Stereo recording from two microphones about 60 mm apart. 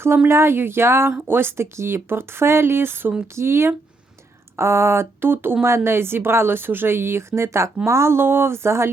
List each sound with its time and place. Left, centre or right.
0.3 s speech: right